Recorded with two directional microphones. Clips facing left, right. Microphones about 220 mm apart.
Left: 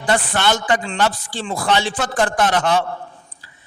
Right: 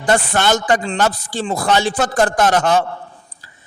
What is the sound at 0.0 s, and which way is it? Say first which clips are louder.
A man's voice: right 3 dB; 45° right (ahead or behind).